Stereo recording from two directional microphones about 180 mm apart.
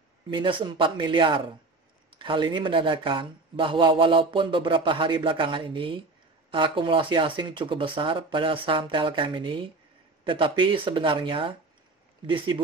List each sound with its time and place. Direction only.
0.3 s speech: 30° right (ahead or behind)